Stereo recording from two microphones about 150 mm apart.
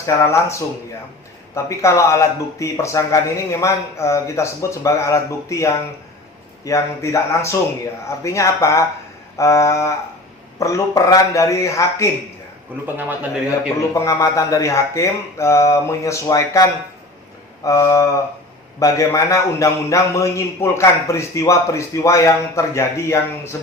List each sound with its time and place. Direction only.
0.0 s a man's voice: 20° left (ahead or behind)
12.8 s a man's voice: 10° right (ahead or behind)
13.9 s a man's voice: 20° left (ahead or behind)